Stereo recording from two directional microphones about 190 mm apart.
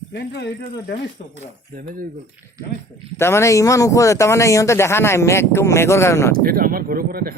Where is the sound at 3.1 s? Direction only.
15° left (ahead or behind).